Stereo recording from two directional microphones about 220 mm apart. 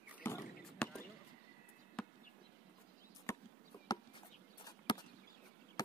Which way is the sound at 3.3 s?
15° left (ahead or behind).